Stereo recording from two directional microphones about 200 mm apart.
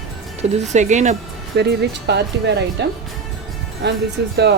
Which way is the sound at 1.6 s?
55° right (ahead or behind).